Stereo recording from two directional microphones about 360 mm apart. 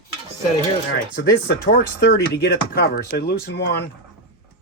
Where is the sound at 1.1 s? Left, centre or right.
Left.